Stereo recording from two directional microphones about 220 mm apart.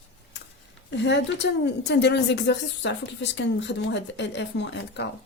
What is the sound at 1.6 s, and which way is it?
Speech, 50° left (ahead or behind).